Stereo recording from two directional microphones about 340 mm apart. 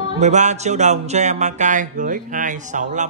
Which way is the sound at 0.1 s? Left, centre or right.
Centre.